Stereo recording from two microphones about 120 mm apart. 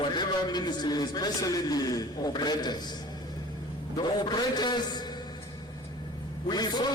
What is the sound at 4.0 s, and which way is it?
A man's voice, 35° left (ahead or behind).